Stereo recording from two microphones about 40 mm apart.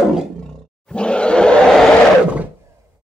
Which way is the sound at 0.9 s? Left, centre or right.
Left.